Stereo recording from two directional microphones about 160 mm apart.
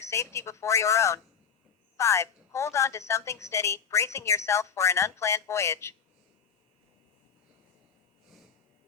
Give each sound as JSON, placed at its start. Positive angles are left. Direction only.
{"t": 0.0, "sound": "a woman's voice", "side_deg": 20}